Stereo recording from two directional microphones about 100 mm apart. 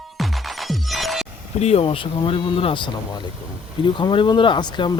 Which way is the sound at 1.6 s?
80° left.